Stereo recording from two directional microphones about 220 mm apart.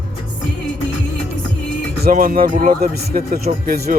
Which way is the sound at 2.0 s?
40° right (ahead or behind).